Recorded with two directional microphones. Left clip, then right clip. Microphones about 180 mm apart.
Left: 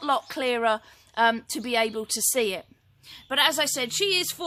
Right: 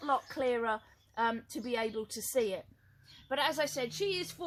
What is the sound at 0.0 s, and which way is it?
Speech, 50° left (ahead or behind).